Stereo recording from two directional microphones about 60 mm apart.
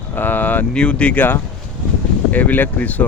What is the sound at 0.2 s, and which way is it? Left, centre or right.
Speech, left.